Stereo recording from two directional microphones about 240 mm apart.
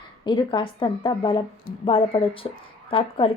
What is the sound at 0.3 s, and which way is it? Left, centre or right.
Speech, centre.